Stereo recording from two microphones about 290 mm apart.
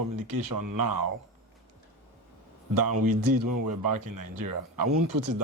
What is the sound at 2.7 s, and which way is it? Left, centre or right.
Speech, right.